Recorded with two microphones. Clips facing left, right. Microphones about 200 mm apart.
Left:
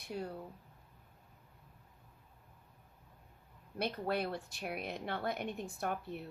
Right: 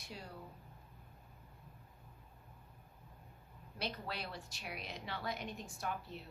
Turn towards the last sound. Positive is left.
turn(degrees=55)  # may be behind; listen again after turning